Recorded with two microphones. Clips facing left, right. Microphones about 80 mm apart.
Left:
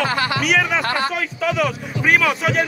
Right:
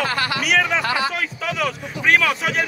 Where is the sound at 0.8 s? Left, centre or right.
Left.